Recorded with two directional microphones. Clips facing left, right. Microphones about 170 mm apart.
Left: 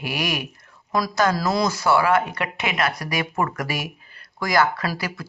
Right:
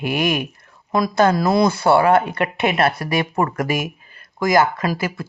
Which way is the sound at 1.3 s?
55° right (ahead or behind).